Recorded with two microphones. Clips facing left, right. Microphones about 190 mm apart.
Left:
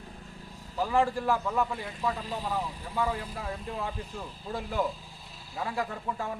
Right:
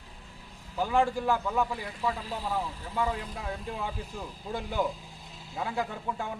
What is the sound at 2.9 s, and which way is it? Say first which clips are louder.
Speech: even; 10° right (ahead or behind).